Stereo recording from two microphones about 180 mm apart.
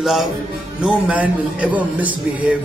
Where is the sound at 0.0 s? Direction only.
Centre (ahead or behind).